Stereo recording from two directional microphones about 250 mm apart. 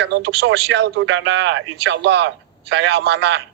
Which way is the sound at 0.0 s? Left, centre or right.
Right.